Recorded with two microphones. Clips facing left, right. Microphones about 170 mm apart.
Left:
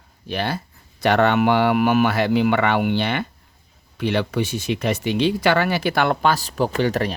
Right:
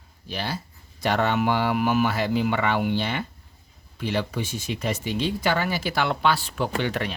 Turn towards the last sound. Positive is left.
turn(degrees=40)  # may be behind; listen again after turning